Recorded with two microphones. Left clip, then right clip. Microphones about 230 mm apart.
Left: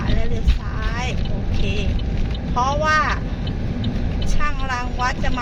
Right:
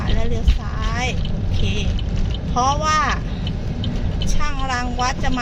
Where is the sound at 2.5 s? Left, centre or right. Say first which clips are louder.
Even; right.